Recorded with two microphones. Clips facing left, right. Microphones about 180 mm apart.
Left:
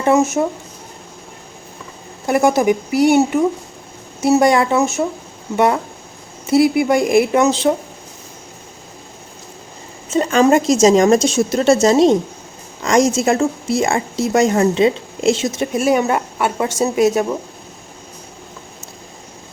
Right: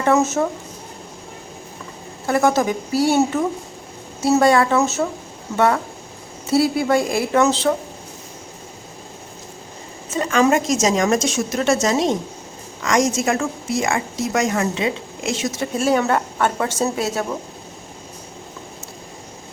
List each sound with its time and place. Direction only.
0.0 s a woman's voice: 15° left (ahead or behind)
2.2 s a woman's voice: 15° left (ahead or behind)
10.2 s a woman's voice: 30° left (ahead or behind)